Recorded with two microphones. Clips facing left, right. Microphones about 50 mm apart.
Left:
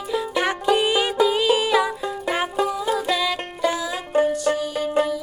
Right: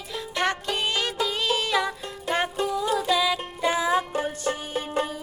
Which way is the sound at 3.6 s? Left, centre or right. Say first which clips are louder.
Right 1 dB; right.